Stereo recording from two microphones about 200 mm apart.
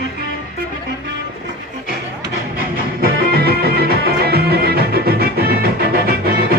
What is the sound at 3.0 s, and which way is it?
Music, 50° right (ahead or behind).